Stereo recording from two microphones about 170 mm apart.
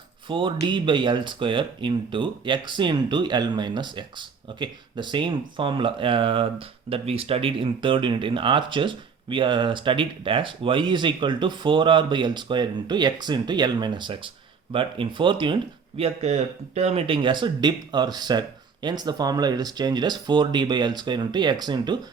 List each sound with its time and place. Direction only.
0.3 s speech: 30° right (ahead or behind)